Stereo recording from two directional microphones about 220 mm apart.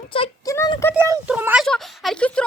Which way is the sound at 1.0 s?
10° right (ahead or behind).